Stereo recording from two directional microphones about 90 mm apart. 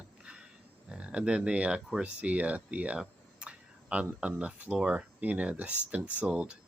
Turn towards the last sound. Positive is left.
turn(degrees=-10)  # may be behind; listen again after turning